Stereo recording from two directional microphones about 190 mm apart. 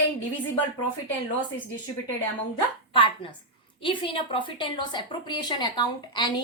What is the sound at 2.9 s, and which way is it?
A woman's voice, 25° left (ahead or behind).